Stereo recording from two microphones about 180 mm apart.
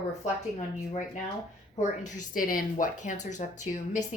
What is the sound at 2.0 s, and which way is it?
Speech, 45° left (ahead or behind).